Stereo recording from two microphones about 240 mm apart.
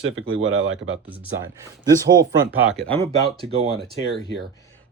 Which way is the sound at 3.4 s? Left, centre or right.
Right.